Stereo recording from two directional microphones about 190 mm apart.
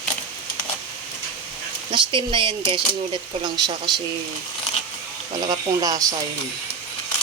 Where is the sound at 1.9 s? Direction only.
25° right (ahead or behind).